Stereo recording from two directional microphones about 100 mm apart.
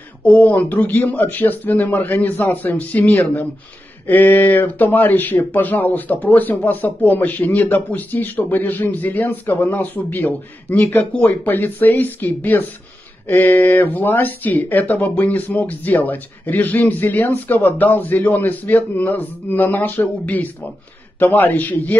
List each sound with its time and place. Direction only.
0.2 s speech: 15° left (ahead or behind)